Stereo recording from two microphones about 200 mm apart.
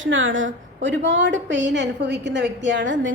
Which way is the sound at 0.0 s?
75° right (ahead or behind).